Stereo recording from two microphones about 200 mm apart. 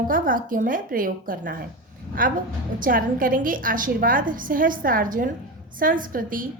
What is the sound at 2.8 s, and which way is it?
Speech, 45° right (ahead or behind).